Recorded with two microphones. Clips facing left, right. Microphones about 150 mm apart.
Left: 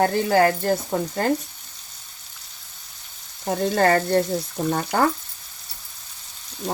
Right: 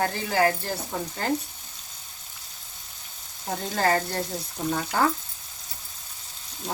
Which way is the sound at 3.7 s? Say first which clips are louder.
Left 6 dB; 55° left (ahead or behind).